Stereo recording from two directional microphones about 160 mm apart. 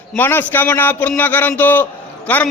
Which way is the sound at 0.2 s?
15° left (ahead or behind).